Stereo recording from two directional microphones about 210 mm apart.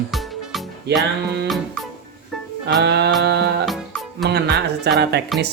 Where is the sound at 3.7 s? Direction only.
Centre (ahead or behind).